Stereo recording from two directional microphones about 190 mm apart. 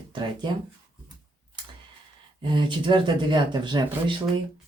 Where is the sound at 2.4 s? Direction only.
25° right (ahead or behind).